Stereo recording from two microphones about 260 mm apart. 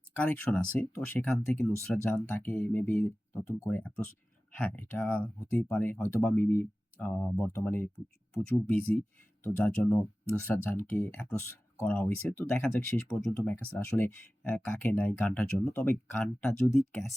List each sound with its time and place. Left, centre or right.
0.2 s speech: centre
9.4 s speech: centre